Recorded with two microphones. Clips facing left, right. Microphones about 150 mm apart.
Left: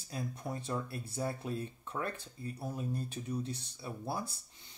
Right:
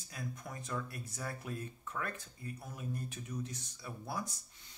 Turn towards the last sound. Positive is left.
turn(degrees=30)  # may be behind; listen again after turning